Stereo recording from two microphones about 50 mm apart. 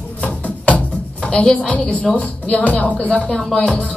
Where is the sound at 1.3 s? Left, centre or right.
Centre.